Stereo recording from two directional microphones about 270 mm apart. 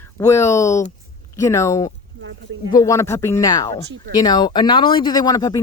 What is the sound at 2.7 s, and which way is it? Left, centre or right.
Speech, centre.